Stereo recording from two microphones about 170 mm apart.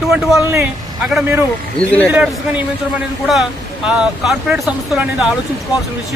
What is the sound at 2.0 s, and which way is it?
Speech, 10° right (ahead or behind).